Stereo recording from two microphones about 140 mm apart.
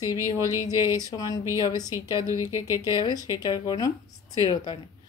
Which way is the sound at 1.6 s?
25° left (ahead or behind).